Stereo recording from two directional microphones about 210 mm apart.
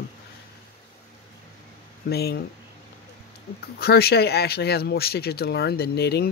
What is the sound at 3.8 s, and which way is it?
Speech, 50° left (ahead or behind).